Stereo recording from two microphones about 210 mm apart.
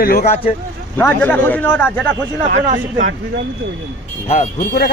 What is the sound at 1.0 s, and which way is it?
Speech, 10° left (ahead or behind).